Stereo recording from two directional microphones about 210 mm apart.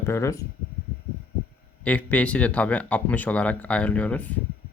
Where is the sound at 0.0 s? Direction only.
15° left (ahead or behind).